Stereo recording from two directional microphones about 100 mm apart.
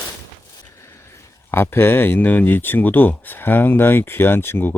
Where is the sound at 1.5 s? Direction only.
25° left (ahead or behind).